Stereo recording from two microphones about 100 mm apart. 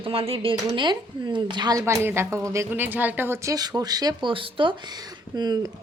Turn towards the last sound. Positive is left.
turn(degrees=-45)  # may be behind; listen again after turning